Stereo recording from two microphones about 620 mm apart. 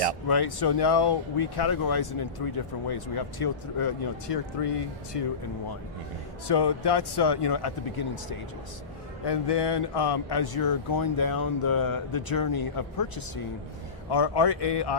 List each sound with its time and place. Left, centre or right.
0.3 s speech: left
6.5 s speech: left